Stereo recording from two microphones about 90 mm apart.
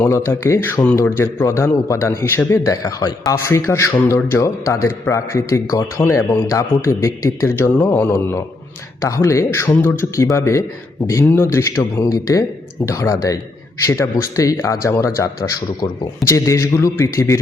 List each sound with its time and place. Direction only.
0.0 s a man's voice: 30° left (ahead or behind)